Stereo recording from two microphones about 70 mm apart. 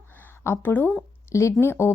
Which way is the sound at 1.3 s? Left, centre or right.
Left.